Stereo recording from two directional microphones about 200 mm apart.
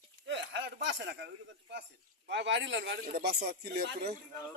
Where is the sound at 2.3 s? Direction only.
60° right (ahead or behind).